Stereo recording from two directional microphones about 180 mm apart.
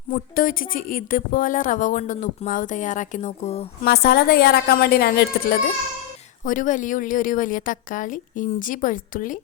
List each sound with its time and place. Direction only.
0.1 s speech: 50° left (ahead or behind)
3.8 s a woman's voice: 60° left (ahead or behind)
6.4 s speech: 45° left (ahead or behind)